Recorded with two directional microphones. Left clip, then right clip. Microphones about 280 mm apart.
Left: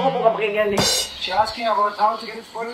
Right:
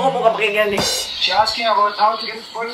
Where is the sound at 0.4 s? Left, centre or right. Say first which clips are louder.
Right 3 dB; centre.